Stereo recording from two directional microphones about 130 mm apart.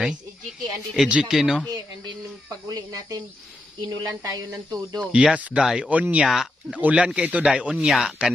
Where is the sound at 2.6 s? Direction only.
25° right (ahead or behind).